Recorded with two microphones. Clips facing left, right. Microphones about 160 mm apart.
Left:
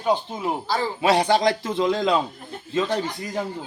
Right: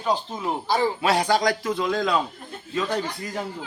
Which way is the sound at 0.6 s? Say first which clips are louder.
Right 6 dB; 20° right (ahead or behind).